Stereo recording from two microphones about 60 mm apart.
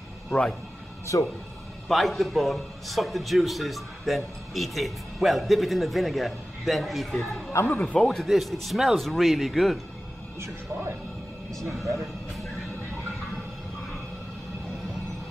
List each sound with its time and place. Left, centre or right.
0.3 s speech: centre
1.1 s speech: left
1.9 s a man's voice: centre
7.6 s speech: left
7.9 s speech: centre
8.3 s a man's voice: centre
10.4 s speech: right